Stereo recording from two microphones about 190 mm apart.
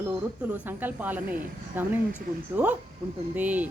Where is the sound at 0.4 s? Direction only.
10° right (ahead or behind).